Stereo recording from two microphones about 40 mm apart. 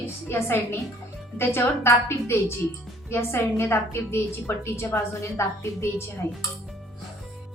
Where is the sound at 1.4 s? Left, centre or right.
Left.